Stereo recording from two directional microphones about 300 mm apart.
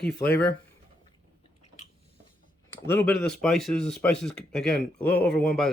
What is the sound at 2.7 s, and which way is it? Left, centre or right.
Speech, centre.